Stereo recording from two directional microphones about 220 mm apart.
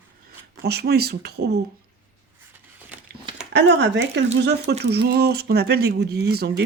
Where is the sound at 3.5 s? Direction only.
50° right (ahead or behind).